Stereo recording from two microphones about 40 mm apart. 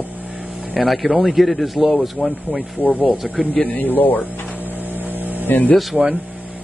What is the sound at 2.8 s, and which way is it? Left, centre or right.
Speech, left.